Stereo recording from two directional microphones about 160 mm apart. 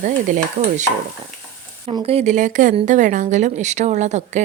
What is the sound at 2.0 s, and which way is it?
A woman's voice, 45° right (ahead or behind).